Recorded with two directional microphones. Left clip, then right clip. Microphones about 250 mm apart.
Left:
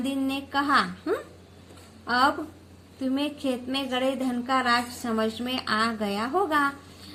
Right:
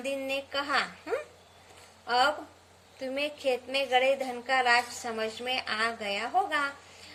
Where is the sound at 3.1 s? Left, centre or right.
Left.